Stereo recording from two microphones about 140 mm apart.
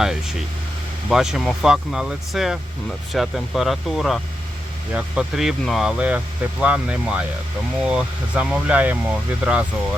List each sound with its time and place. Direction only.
0.0 s speech: 5° right (ahead or behind)